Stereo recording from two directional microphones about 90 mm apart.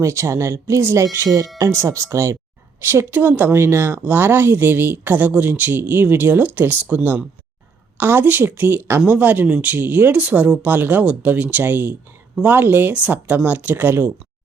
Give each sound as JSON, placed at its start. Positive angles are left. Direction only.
{"t": 0.0, "sound": "a woman's voice", "side_deg": -30}